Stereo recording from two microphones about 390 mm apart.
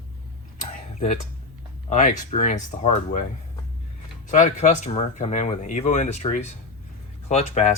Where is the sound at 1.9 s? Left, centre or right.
Centre.